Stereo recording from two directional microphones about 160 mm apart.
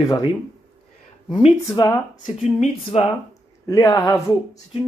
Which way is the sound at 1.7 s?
20° left (ahead or behind).